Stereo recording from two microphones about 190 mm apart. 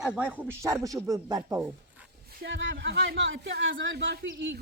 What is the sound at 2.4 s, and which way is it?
Speech, 75° right (ahead or behind).